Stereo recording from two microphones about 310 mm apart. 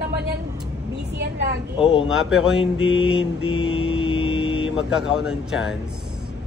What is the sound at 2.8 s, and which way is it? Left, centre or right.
Mantra, left.